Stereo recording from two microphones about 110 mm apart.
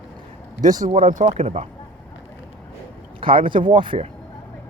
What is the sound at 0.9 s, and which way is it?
Speech, 90° right.